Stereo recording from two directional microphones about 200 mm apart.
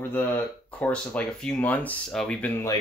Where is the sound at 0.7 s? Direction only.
5° left (ahead or behind).